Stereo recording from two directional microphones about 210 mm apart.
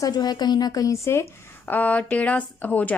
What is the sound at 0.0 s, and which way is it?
A woman's voice, 20° left (ahead or behind).